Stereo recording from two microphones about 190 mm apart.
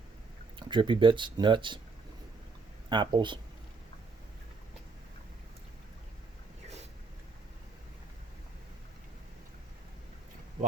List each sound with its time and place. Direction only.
0.7 s speech: 25° right (ahead or behind)
2.9 s speech: 25° right (ahead or behind)